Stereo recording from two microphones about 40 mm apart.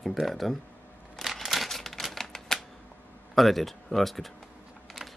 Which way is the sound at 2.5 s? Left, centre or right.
Centre.